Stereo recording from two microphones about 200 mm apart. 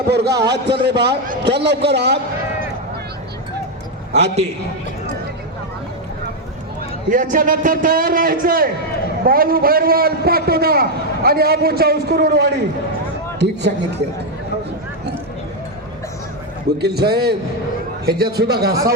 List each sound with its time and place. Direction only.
0.1 s a man's voice: 55° right (ahead or behind)
4.1 s a man's voice: 35° right (ahead or behind)
7.1 s a man's voice: 40° right (ahead or behind); by 13.7 s 60° right (ahead or behind)
16.8 s a man's voice: 55° right (ahead or behind)